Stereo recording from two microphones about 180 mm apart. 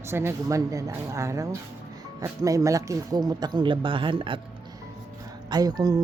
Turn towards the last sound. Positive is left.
turn(degrees=-20)  # may be behind; listen again after turning